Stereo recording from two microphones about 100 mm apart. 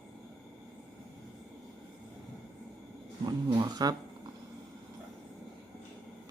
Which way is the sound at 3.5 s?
45° right (ahead or behind).